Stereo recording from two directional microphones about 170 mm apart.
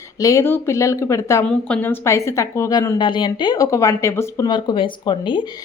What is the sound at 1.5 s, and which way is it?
A woman's voice, 5° left (ahead or behind).